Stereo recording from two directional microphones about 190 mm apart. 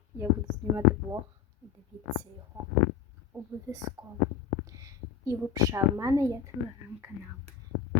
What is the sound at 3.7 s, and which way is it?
A woman's voice, 20° right (ahead or behind).